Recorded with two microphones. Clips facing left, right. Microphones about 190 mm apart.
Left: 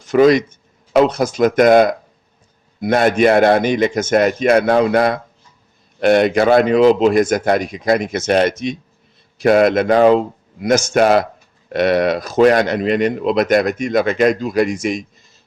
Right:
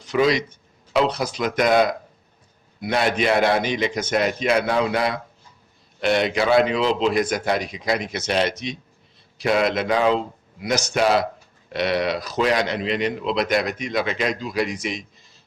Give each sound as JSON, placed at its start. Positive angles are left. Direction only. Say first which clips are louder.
{"t": 0.0, "sound": "speech", "louder": "left 8 dB", "side_deg": 50}